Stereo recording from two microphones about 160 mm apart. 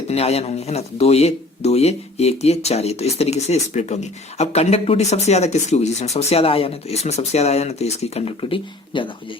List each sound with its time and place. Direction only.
0.1 s speech: 40° left (ahead or behind)